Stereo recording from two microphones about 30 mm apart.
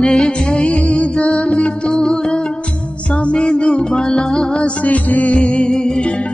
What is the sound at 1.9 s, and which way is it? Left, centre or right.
Music, centre.